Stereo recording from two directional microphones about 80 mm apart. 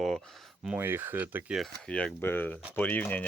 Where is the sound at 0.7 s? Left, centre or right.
Right.